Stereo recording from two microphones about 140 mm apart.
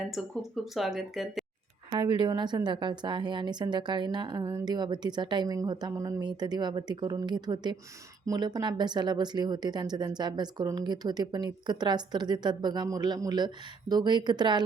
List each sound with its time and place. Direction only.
0.1 s speech: centre (ahead or behind)
1.9 s speech: 35° right (ahead or behind)